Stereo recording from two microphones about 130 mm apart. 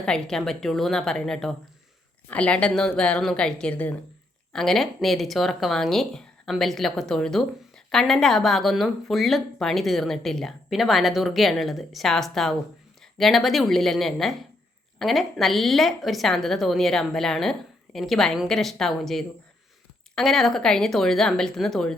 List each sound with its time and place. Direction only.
0.0 s a woman's voice: 5° left (ahead or behind)